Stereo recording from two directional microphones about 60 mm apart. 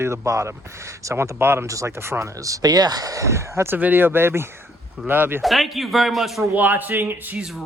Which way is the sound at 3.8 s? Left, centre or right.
Right.